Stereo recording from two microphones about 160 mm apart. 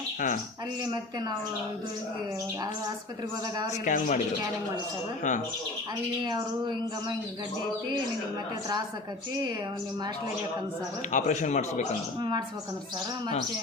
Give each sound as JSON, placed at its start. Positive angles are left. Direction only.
{"t": 3.8, "sound": "a man's voice", "side_deg": 50}
{"t": 11.1, "sound": "a man's voice", "side_deg": 50}